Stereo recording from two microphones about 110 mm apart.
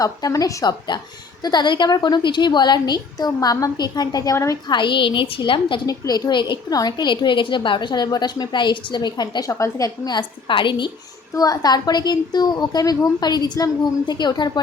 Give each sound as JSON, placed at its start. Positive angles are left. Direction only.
{"t": 0.0, "sound": "a woman's voice", "side_deg": 30}
{"t": 4.7, "sound": "a woman's voice", "side_deg": 45}
{"t": 5.8, "sound": "a woman's voice", "side_deg": 35}
{"t": 9.5, "sound": "a woman's voice", "side_deg": 30}
{"t": 10.2, "sound": "a woman's voice", "side_deg": 50}
{"t": 11.3, "sound": "a woman's voice", "side_deg": 35}